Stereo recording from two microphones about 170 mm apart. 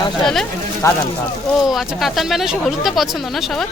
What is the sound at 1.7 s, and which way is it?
Speech, centre (ahead or behind).